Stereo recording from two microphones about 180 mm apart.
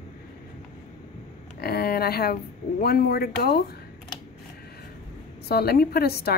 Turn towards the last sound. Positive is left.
turn(degrees=60)  # may be behind; listen again after turning